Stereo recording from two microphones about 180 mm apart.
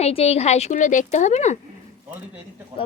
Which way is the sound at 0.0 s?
35° left (ahead or behind).